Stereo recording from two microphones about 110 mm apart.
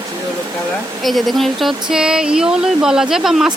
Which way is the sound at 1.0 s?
Centre (ahead or behind).